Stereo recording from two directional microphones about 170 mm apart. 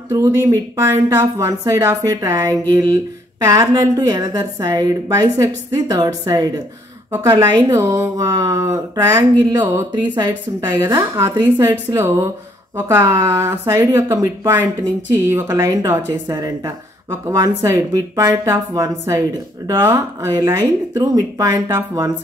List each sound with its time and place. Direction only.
0.1 s speech: 15° right (ahead or behind)